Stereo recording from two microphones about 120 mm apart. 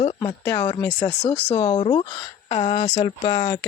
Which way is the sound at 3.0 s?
45° left (ahead or behind).